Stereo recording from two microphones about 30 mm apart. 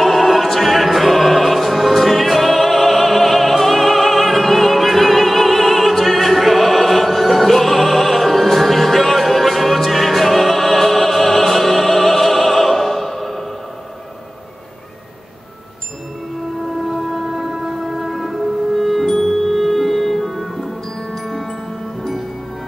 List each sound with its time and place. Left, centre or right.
0.0 s music: centre
16.7 s a sound: centre
17.7 s music: centre